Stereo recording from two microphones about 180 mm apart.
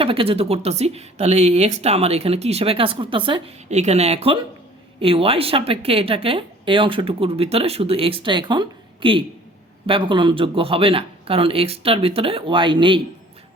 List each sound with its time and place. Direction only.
0.0 s a woman's voice: 30° right (ahead or behind)